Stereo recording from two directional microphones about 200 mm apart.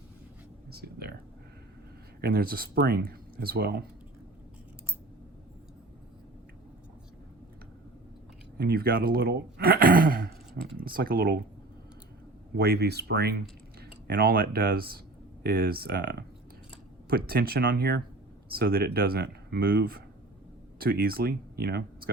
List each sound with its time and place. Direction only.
0.7 s speech: 50° right (ahead or behind)
2.2 s speech: 50° right (ahead or behind)
8.5 s speech: 50° right (ahead or behind)
12.5 s speech: 50° right (ahead or behind)